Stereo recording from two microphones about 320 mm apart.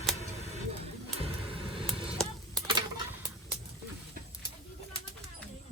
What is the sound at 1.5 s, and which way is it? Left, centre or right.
Vehicle, centre.